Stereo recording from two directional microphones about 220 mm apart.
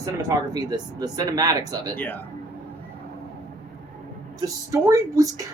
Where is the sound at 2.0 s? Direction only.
5° left (ahead or behind).